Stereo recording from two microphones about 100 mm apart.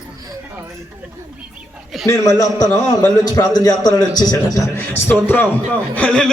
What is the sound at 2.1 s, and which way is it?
A man's voice, 35° left (ahead or behind).